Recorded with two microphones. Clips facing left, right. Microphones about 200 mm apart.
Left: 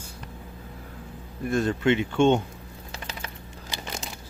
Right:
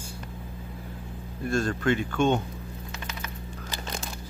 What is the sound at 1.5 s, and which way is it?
Speech, 20° left (ahead or behind).